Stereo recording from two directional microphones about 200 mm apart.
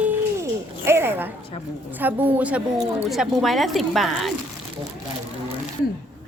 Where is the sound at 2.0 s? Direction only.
10° right (ahead or behind).